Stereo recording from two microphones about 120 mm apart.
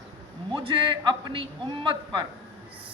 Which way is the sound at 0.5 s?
45° right (ahead or behind).